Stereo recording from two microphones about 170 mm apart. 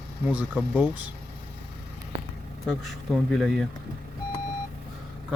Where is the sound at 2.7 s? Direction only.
5° left (ahead or behind).